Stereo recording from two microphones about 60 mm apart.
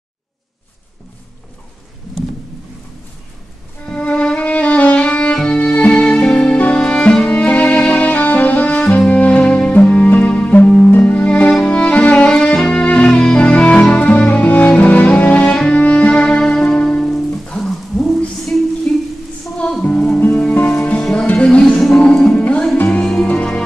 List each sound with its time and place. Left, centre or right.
3.8 s violin: left
5.6 s music: left
12.4 s music: centre
17.0 s music: centre
18.9 s a sound: centre
19.8 s music: left
20.8 s music: centre
21.7 s music: centre